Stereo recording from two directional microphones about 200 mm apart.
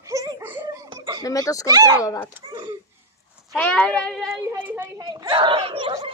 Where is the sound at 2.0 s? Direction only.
15° left (ahead or behind).